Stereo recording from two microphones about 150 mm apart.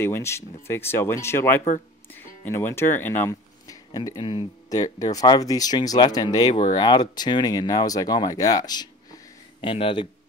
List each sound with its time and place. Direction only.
0.0 s speech: 15° left (ahead or behind); by 10.0 s 35° left (ahead or behind)